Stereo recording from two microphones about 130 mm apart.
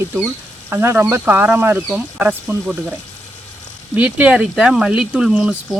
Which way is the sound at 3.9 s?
10° right (ahead or behind).